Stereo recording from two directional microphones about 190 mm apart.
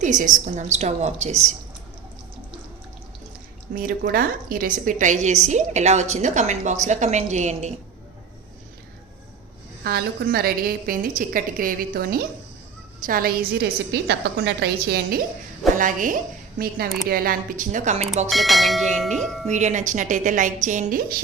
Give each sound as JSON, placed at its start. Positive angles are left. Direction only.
{"t": 0.0, "sound": "a woman's voice", "side_deg": -40}
{"t": 3.8, "sound": "a woman's voice", "side_deg": -50}
{"t": 9.8, "sound": "a woman's voice", "side_deg": -55}
{"t": 15.7, "sound": "a woman's voice", "side_deg": -45}
{"t": 18.3, "sound": "bell", "side_deg": 0}
{"t": 19.5, "sound": "a woman's voice", "side_deg": -40}